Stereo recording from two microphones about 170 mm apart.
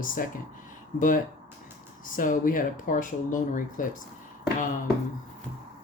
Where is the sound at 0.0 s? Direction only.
55° left (ahead or behind).